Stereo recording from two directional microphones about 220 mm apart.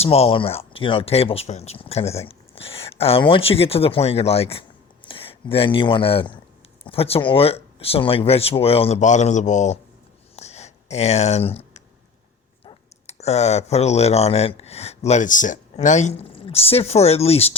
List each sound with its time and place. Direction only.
0.0 s speech: 25° left (ahead or behind)
10.3 s a sound: 30° left (ahead or behind)
12.6 s speech: 30° left (ahead or behind)